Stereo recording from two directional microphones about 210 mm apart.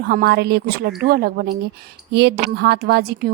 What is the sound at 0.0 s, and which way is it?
A woman's voice, 45° right (ahead or behind).